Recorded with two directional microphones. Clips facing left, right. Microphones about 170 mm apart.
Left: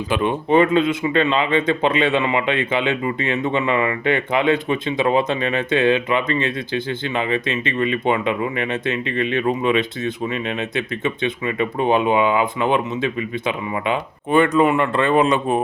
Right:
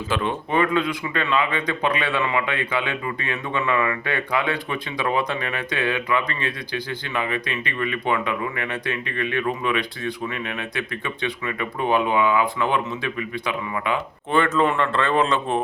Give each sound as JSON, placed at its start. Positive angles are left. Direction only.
{"t": 0.1, "sound": "speech", "side_deg": 15}